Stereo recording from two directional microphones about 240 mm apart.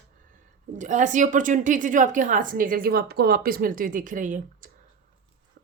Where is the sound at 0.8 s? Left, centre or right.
Right.